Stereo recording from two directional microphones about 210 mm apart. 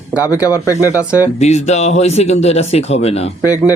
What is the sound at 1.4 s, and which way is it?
A man's voice, 30° left (ahead or behind).